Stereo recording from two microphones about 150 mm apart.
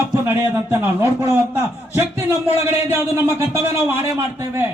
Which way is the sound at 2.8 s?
15° right (ahead or behind).